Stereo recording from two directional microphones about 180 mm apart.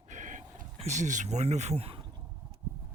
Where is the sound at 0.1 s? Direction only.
45° right (ahead or behind).